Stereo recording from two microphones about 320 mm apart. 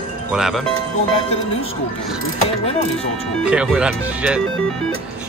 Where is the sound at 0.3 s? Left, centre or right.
Centre.